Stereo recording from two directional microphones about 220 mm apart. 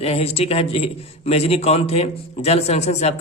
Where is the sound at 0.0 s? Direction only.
25° left (ahead or behind).